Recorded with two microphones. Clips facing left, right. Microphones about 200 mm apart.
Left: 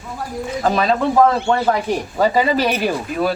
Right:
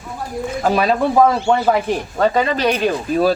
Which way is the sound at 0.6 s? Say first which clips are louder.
Right 1 dB; 10° right (ahead or behind).